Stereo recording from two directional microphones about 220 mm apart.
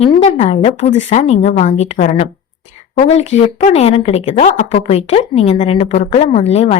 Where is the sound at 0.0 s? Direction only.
30° left (ahead or behind).